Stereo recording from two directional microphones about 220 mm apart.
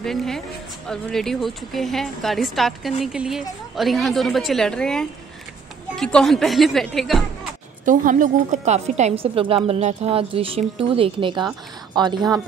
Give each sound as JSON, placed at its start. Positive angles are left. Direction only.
{"t": 0.0, "sound": "speech", "side_deg": 0}
{"t": 7.8, "sound": "a woman's voice", "side_deg": -35}